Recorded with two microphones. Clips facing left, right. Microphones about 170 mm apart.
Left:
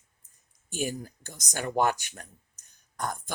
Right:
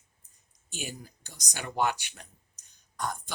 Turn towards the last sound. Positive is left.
turn(degrees=50)  # may be behind; listen again after turning